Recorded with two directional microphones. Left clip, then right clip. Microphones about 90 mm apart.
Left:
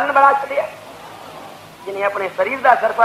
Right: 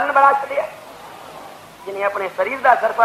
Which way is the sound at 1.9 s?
30° right (ahead or behind).